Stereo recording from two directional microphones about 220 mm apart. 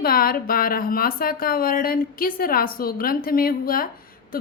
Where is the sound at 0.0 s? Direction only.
40° left (ahead or behind).